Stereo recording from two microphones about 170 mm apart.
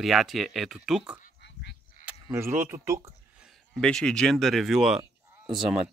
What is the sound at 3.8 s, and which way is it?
Speech, 5° left (ahead or behind).